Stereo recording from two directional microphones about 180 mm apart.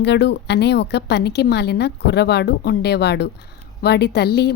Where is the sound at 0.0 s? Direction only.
70° left (ahead or behind).